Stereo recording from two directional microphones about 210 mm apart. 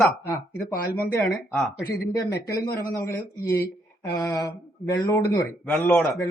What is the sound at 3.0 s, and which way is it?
Speech, 45° left (ahead or behind).